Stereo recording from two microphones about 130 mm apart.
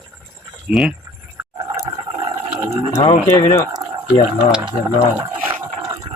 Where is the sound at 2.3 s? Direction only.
20° right (ahead or behind).